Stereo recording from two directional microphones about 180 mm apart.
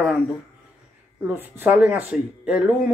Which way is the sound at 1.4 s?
10° right (ahead or behind).